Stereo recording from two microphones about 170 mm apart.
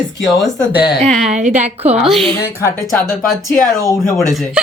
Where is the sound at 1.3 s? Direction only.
45° right (ahead or behind).